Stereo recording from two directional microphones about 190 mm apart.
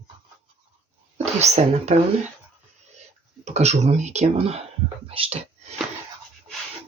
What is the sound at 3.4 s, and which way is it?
Speech, 35° right (ahead or behind).